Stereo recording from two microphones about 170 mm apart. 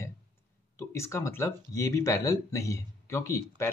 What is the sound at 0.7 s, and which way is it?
Speech, 15° left (ahead or behind).